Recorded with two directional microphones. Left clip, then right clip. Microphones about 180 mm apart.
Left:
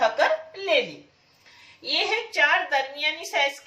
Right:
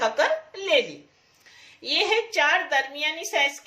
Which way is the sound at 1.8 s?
60° right (ahead or behind).